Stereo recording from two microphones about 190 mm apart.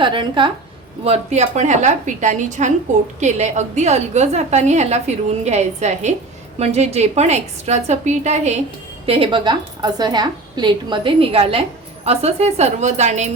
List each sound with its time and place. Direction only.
0.0 s a woman's voice: 25° right (ahead or behind)